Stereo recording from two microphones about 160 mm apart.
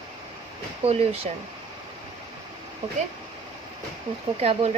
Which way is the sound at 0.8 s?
40° right (ahead or behind).